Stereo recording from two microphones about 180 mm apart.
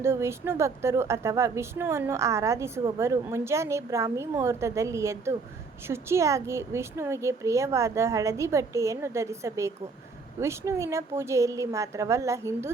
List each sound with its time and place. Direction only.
0.0 s a woman's voice: 15° right (ahead or behind)